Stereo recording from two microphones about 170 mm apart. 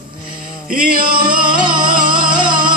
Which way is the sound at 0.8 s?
30° right (ahead or behind).